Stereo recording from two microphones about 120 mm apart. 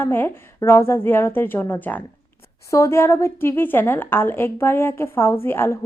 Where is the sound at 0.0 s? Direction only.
20° left (ahead or behind).